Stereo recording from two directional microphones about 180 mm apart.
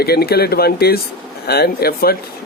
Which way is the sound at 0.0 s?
60° left (ahead or behind).